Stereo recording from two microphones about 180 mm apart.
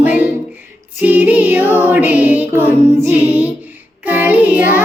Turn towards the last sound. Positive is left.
turn(degrees=-10)  # may be behind; listen again after turning